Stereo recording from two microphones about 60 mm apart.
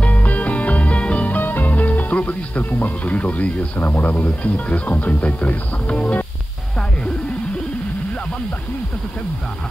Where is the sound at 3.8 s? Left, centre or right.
Left.